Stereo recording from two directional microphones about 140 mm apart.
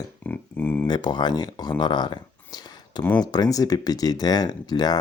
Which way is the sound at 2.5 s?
30° left (ahead or behind).